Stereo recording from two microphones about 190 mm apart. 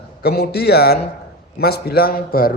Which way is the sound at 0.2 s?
55° left (ahead or behind).